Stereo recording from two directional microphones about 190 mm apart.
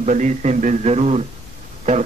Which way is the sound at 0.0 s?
40° right (ahead or behind).